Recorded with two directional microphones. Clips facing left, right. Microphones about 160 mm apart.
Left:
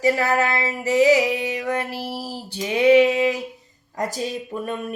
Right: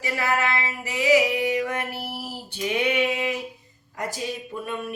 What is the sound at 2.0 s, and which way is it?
Female singing, 35° left (ahead or behind).